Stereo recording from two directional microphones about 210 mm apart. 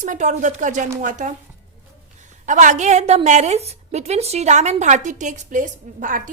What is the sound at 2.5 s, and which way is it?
A woman's voice, 35° right (ahead or behind).